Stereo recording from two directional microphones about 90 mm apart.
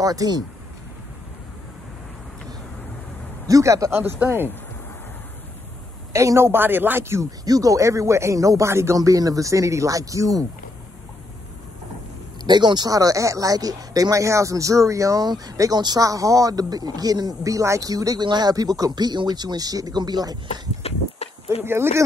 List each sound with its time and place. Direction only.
0.0 s speech: 45° right (ahead or behind)
3.4 s speech: 40° right (ahead or behind)
4.0 s a woman's voice: 25° right (ahead or behind)
6.1 s a woman's voice: 30° right (ahead or behind)
7.2 s speech: 45° right (ahead or behind)
12.4 s speech: 55° right (ahead or behind)
21.5 s a woman's voice: 25° right (ahead or behind)